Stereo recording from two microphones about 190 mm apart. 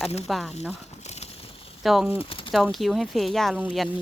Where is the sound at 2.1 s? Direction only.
30° left (ahead or behind).